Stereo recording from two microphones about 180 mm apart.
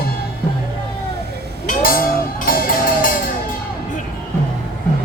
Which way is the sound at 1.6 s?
55° left (ahead or behind).